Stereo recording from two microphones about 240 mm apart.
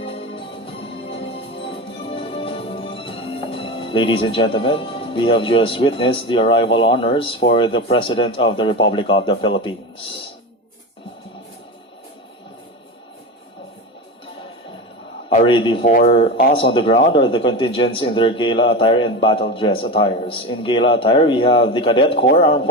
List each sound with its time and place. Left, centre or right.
0.0 s music: left
15.3 s speech: left